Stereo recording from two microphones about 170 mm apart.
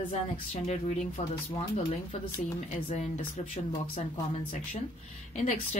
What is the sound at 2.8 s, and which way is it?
Speech, 45° left (ahead or behind).